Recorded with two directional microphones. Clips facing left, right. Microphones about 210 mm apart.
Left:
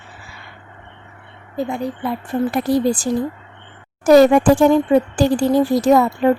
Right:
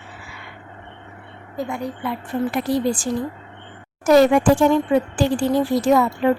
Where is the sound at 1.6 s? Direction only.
30° left (ahead or behind).